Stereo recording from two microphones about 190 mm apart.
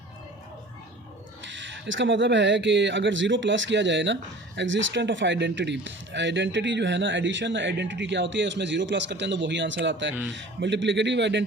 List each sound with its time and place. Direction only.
1.5 s speech: 75° right (ahead or behind)